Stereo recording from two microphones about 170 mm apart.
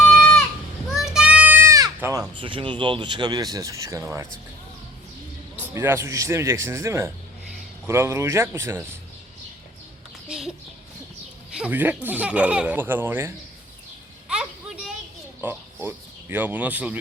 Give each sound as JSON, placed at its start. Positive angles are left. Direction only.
{"t": 0.1, "sound": "goat", "side_deg": 5}
{"t": 0.9, "sound": "children playing", "side_deg": -5}
{"t": 2.3, "sound": "speech", "side_deg": -30}
{"t": 5.5, "sound": "speech", "side_deg": -10}
{"t": 10.2, "sound": "a sound", "side_deg": -5}
{"t": 11.5, "sound": "speech", "side_deg": -10}
{"t": 14.3, "sound": "a sound", "side_deg": -5}
{"t": 15.4, "sound": "speech", "side_deg": -10}